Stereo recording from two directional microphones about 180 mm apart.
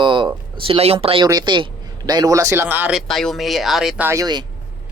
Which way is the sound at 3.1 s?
Centre (ahead or behind).